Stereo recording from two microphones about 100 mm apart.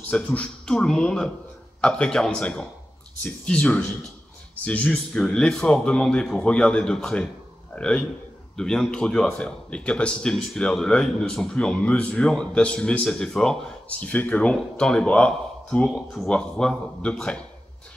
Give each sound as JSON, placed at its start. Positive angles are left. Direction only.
{"t": 0.1, "sound": "a man's voice", "side_deg": 10}
{"t": 15.9, "sound": "speech", "side_deg": -5}
{"t": 16.3, "sound": "speech", "side_deg": 10}